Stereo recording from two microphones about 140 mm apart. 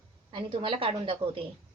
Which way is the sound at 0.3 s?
40° right (ahead or behind).